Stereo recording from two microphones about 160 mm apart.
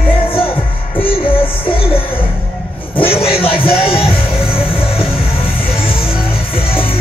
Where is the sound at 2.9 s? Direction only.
35° left (ahead or behind).